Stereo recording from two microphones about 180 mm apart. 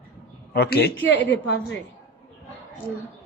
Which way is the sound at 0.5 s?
65° left (ahead or behind).